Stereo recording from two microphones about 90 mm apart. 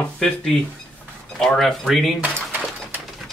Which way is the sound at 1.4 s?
5° left (ahead or behind).